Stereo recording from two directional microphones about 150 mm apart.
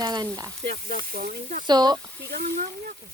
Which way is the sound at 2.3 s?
80° right.